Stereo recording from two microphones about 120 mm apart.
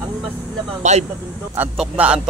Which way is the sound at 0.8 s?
75° right (ahead or behind).